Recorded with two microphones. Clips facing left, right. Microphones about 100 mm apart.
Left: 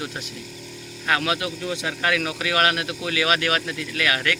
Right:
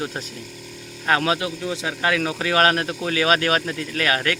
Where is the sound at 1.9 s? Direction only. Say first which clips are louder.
Right 2 dB; 20° right (ahead or behind).